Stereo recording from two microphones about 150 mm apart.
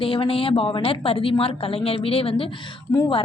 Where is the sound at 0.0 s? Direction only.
40° left (ahead or behind).